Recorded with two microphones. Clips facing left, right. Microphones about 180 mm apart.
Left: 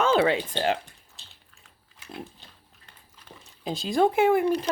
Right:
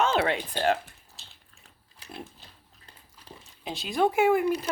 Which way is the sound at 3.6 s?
30° left (ahead or behind).